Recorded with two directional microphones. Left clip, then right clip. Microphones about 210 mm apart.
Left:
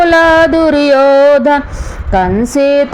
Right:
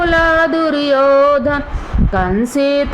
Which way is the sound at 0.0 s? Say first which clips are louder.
Left 6 dB; 35° left (ahead or behind).